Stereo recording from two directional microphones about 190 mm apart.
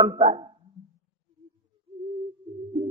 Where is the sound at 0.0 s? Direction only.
30° right (ahead or behind).